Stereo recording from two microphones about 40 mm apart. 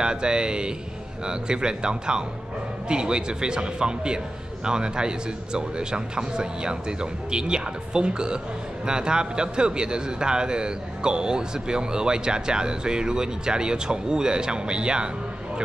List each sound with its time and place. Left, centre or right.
0.0 s a man's voice: right